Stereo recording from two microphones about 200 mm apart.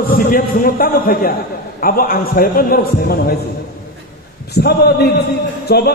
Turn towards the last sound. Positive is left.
turn(degrees=55)  # may be behind; listen again after turning